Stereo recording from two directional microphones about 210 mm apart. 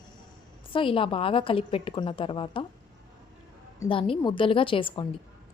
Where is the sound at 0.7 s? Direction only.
25° left (ahead or behind).